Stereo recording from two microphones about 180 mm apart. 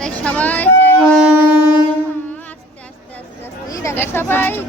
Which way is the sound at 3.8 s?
15° left (ahead or behind).